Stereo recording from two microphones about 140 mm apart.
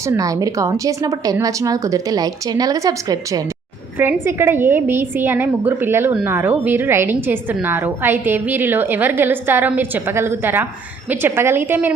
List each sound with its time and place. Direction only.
0.0 s a woman's voice: 25° right (ahead or behind)